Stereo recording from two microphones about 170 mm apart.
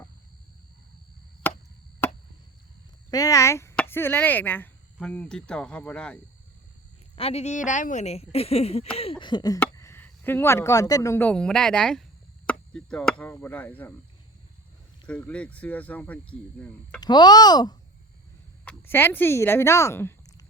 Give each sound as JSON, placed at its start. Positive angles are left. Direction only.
{"t": 3.1, "sound": "speech", "side_deg": 20}
{"t": 7.2, "sound": "speech", "side_deg": 40}
{"t": 15.0, "sound": "speech", "side_deg": 5}
{"t": 17.0, "sound": "speech", "side_deg": 25}
{"t": 18.6, "sound": "speech", "side_deg": 10}